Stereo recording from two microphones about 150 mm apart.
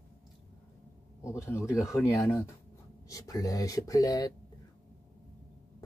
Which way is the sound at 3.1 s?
25° left (ahead or behind).